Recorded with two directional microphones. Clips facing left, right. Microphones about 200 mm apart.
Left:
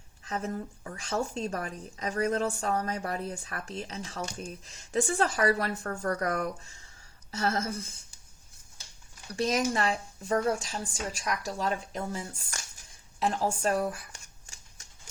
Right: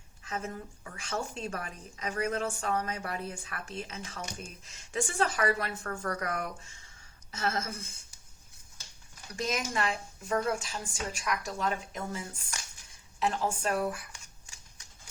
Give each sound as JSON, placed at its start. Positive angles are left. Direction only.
{"t": 0.3, "sound": "a woman's voice", "side_deg": 35}
{"t": 9.3, "sound": "a woman's voice", "side_deg": 30}